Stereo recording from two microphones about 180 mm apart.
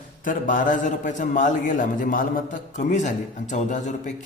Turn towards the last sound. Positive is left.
turn(degrees=40)  # may be behind; listen again after turning